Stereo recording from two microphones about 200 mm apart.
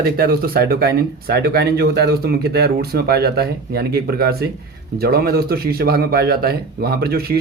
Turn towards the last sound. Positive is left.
turn(degrees=-50)  # may be behind; listen again after turning